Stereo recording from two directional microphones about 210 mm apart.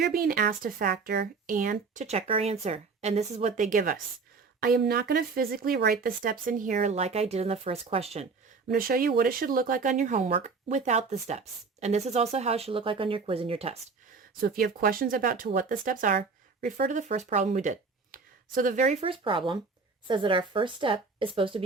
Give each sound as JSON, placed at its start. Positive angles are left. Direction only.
{"t": 0.0, "sound": "speech", "side_deg": -45}
{"t": 8.7, "sound": "speech", "side_deg": -45}
{"t": 14.4, "sound": "a woman's voice", "side_deg": -45}